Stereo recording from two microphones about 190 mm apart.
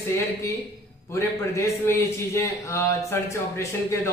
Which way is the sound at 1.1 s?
15° left (ahead or behind).